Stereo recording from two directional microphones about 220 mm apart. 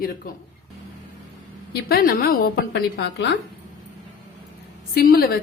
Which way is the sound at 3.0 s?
55° left (ahead or behind).